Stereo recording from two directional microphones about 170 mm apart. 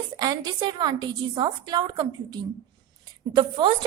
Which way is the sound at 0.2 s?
25° right (ahead or behind).